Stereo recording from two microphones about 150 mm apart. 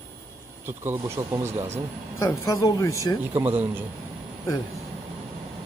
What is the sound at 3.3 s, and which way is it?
Speech, 15° right (ahead or behind).